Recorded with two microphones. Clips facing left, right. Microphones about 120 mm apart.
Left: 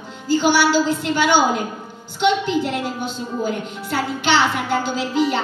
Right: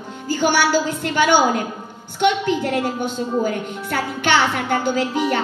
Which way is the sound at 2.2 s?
50° right (ahead or behind).